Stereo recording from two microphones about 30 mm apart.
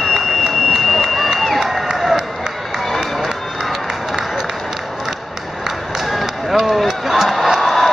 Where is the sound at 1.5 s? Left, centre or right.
Centre.